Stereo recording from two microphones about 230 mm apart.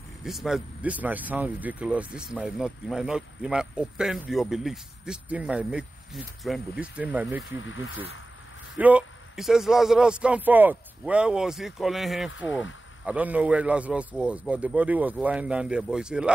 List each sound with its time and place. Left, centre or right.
0.2 s speech: centre
7.5 s speech: left
8.7 s speech: centre